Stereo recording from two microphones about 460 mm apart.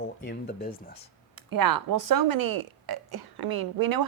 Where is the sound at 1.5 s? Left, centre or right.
Right.